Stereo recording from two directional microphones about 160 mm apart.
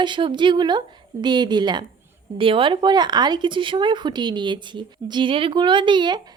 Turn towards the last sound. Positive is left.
turn(degrees=-30)  # may be behind; listen again after turning